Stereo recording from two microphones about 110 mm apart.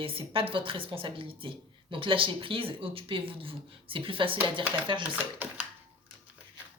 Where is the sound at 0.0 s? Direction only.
55° right (ahead or behind).